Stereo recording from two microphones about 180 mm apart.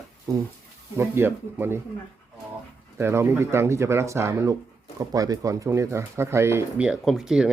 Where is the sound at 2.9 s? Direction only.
15° right (ahead or behind).